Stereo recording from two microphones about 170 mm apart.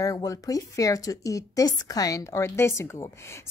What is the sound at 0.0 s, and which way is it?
A woman's voice, 20° left (ahead or behind).